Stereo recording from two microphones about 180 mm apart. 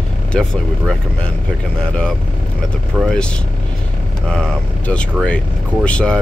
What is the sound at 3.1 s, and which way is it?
Speech, 5° left (ahead or behind).